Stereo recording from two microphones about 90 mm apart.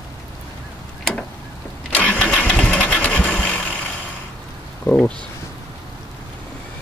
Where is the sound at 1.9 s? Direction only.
15° left (ahead or behind).